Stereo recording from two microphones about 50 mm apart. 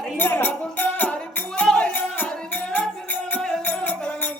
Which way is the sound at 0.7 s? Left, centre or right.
Left.